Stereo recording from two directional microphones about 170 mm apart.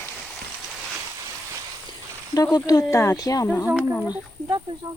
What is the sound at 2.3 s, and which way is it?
Speech, 20° left (ahead or behind).